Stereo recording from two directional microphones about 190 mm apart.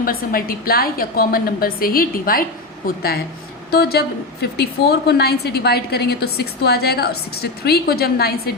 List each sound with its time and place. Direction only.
0.0 s a woman's voice: 50° left (ahead or behind)